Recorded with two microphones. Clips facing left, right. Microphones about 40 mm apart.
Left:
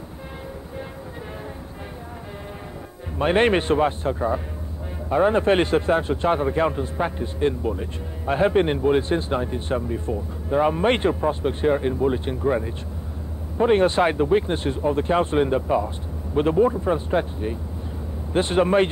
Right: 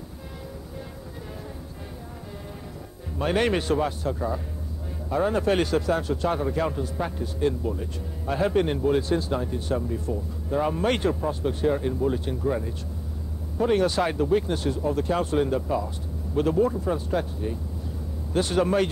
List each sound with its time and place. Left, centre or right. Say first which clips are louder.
3.2 s a man's voice: left 5 dB; left